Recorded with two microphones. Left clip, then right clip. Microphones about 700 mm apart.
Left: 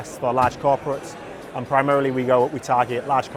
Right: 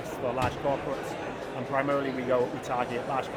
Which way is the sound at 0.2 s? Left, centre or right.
Left.